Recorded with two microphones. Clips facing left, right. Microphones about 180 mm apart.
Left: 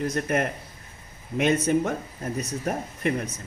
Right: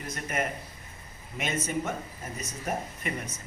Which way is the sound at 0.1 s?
65° left (ahead or behind).